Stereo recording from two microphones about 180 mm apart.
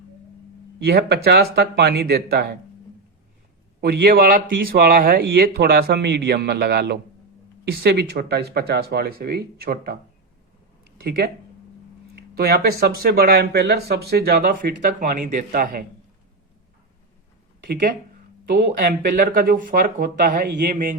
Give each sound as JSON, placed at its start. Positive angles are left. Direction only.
{"t": 0.9, "sound": "speech", "side_deg": -65}
{"t": 3.8, "sound": "speech", "side_deg": -55}
{"t": 11.0, "sound": "speech", "side_deg": -60}
{"t": 12.1, "sound": "a sound", "side_deg": -60}
{"t": 12.8, "sound": "speech", "side_deg": -60}
{"t": 18.4, "sound": "speech", "side_deg": -55}